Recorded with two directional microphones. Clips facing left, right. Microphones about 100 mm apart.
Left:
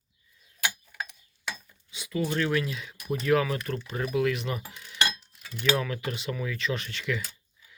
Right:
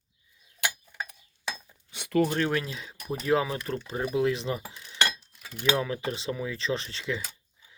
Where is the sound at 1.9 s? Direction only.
60° right (ahead or behind).